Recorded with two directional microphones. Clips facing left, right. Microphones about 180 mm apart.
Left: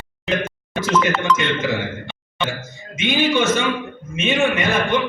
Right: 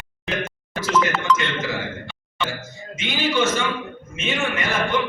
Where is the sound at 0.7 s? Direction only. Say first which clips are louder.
Left 2 dB; 20° left (ahead or behind).